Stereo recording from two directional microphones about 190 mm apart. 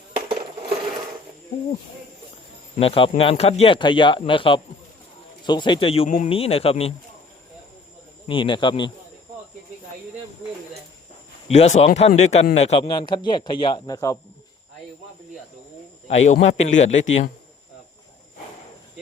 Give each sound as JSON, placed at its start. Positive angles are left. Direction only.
{"t": 0.3, "sound": "coin", "side_deg": -25}
{"t": 2.7, "sound": "a man's voice", "side_deg": 30}
{"t": 8.3, "sound": "speech", "side_deg": 25}
{"t": 11.4, "sound": "a man's voice", "side_deg": 35}
{"t": 16.0, "sound": "a man's voice", "side_deg": 35}